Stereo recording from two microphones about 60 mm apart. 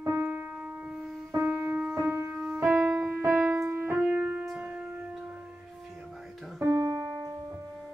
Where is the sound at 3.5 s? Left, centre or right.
Right.